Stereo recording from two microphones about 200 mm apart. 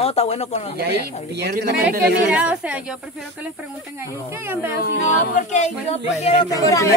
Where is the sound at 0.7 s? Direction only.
55° right (ahead or behind).